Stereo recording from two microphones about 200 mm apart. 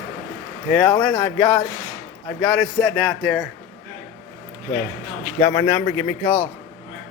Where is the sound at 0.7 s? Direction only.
5° left (ahead or behind).